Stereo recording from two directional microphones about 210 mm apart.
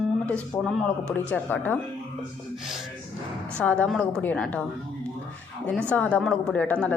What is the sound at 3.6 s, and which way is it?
A woman's voice, 5° left (ahead or behind).